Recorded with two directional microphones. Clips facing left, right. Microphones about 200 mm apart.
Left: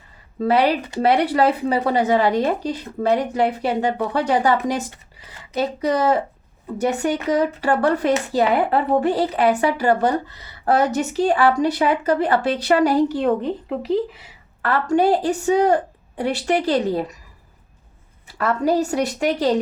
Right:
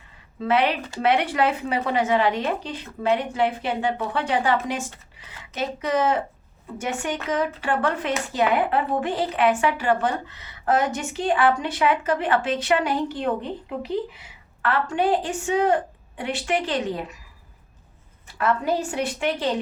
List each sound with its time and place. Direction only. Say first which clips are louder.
0.3 s a woman's voice: left 4 dB; 35° left (ahead or behind)
5.5 s a woman's voice: left 4 dB; 35° left (ahead or behind)
18.3 s a woman's voice: left 4 dB; 40° left (ahead or behind)